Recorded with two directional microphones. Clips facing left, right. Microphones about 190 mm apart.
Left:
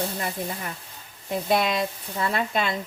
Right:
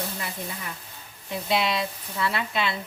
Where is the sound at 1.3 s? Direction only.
50° left (ahead or behind).